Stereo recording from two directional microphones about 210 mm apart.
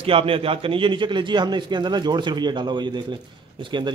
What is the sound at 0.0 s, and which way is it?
A man's voice, 25° right (ahead or behind).